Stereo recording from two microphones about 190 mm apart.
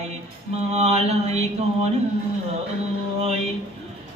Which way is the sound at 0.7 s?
35° right (ahead or behind).